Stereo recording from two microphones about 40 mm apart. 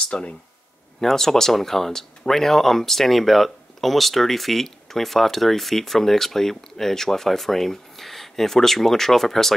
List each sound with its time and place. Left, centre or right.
0.1 s speech: left
1.0 s speech: centre